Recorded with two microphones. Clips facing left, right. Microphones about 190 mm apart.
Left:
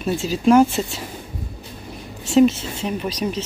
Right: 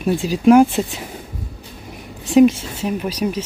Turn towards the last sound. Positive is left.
turn(degrees=-10)  # may be behind; listen again after turning